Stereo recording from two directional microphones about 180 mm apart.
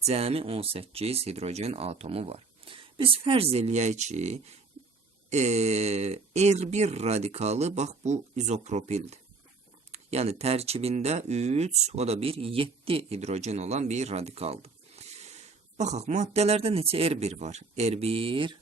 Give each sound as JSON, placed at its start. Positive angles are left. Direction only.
{"t": 0.0, "sound": "speech", "side_deg": -35}